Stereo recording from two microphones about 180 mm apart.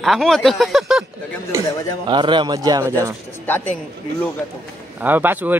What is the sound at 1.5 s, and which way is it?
Speech, 15° right (ahead or behind).